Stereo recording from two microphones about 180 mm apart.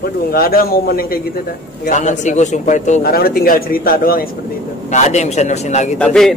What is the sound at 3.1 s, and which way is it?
Speech, 55° left (ahead or behind).